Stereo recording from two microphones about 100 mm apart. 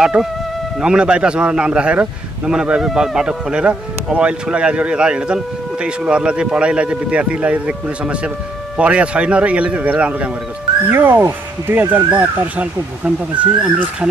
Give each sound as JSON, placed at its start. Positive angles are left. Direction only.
{"t": 0.0, "sound": "a man's voice", "side_deg": -10}